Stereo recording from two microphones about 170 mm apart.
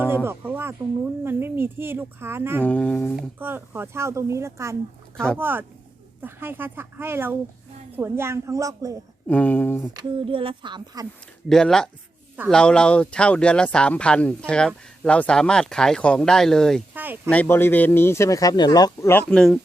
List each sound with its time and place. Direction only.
0.3 s speech: 15° right (ahead or behind)
2.6 s speech: 10° left (ahead or behind)
3.2 s speech: 10° right (ahead or behind)
5.1 s speech: 5° left (ahead or behind)
5.4 s speech: 10° right (ahead or behind)
9.2 s speech: 10° left (ahead or behind)
9.9 s speech: 25° right (ahead or behind)
11.4 s speech: 5° left (ahead or behind)
16.9 s a sound: 10° right (ahead or behind)
17.2 s speech: 10° left (ahead or behind)
19.3 s speech: 5° left (ahead or behind)